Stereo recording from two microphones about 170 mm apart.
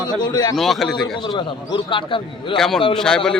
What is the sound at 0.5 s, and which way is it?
Speech, centre (ahead or behind).